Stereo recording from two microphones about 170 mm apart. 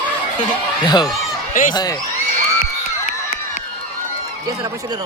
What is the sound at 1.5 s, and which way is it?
Speech, 50° left (ahead or behind).